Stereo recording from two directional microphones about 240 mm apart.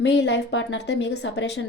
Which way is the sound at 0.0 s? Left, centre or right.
Left.